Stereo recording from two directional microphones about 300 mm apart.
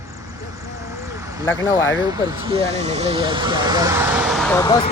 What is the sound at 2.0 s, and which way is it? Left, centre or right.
Speech, centre.